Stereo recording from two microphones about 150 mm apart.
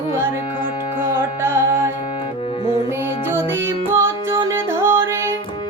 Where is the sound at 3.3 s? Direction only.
15° right (ahead or behind).